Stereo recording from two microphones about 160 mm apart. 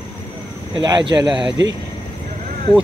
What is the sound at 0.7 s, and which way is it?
Speech, 25° right (ahead or behind).